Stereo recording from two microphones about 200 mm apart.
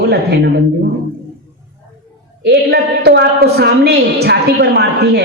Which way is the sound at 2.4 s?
55° right (ahead or behind).